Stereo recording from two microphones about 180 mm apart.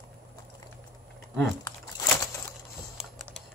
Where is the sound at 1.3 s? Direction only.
15° left (ahead or behind).